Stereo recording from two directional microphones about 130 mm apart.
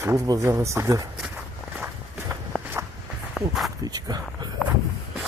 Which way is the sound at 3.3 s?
Centre (ahead or behind).